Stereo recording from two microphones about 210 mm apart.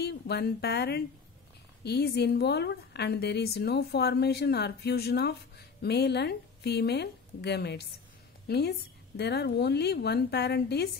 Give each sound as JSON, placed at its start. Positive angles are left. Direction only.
{"t": 0.0, "sound": "a woman's voice", "side_deg": 50}